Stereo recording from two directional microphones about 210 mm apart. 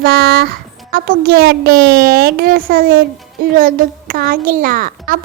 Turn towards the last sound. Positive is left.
turn(degrees=-40)  # may be behind; listen again after turning